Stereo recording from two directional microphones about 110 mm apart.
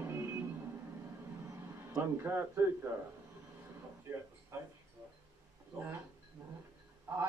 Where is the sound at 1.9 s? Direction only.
25° right (ahead or behind).